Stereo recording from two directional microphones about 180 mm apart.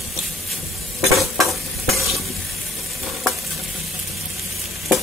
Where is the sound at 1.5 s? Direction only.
Centre (ahead or behind).